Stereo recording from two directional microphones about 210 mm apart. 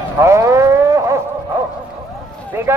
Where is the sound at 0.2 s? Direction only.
15° right (ahead or behind).